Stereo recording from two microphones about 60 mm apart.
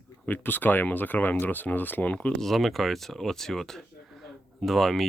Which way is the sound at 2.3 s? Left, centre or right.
Centre.